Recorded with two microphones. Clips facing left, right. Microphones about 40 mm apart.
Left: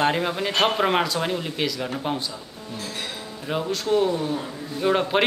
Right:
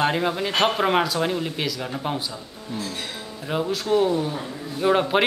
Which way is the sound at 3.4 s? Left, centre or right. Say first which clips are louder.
Right 1 dB; centre.